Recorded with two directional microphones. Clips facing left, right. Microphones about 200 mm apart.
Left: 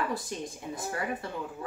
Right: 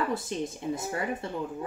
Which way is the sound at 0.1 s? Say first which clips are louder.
Right 4 dB; 25° right (ahead or behind).